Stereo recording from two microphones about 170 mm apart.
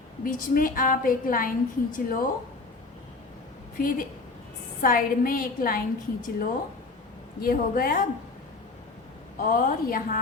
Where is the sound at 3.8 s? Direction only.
55° left (ahead or behind).